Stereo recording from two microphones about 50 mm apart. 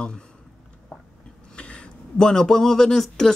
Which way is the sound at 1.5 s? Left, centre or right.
Left.